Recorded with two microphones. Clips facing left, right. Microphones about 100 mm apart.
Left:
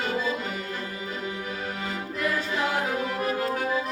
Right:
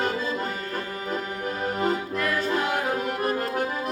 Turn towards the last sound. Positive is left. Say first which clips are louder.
# right 1 dB
turn(degrees=-45)  # may be behind; listen again after turning